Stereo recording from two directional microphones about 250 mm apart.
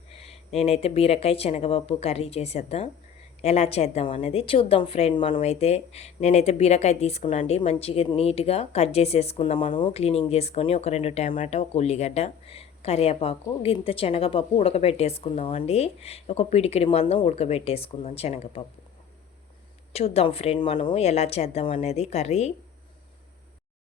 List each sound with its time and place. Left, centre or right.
0.5 s a woman's voice: left
19.9 s a woman's voice: left